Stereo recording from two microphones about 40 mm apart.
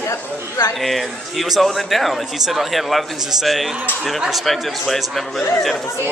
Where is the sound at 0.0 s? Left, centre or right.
Left.